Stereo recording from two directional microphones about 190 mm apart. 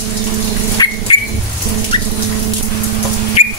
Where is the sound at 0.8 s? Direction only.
20° left (ahead or behind).